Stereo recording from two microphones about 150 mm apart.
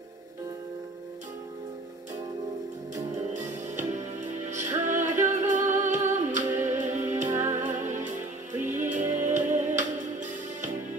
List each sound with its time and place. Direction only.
3.3 s music: 55° right (ahead or behind)
7.2 s music: 20° right (ahead or behind)
7.5 s music: 55° right (ahead or behind)